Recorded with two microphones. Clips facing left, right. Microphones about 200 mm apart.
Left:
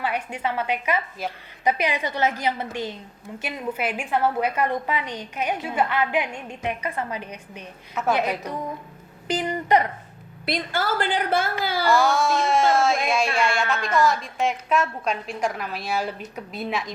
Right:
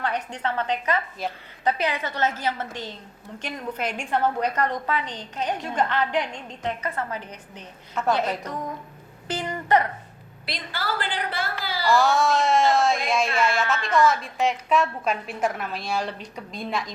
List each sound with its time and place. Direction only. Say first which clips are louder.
0.0 s a woman's voice: left 1 dB; 10° left (ahead or behind)
9.2 s a sound: left 4 dB; 15° left (ahead or behind)
10.4 s a woman's voice: left 6 dB; 50° left (ahead or behind)
11.9 s speech: right 1 dB; centre (ahead or behind)